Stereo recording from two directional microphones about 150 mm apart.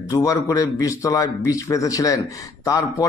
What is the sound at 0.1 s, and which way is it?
Speech, 20° left (ahead or behind).